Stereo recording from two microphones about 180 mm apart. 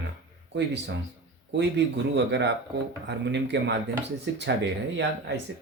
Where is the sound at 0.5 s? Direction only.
70° right (ahead or behind).